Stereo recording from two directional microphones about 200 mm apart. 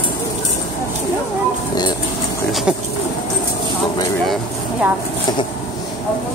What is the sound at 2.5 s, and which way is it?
Speech, centre (ahead or behind).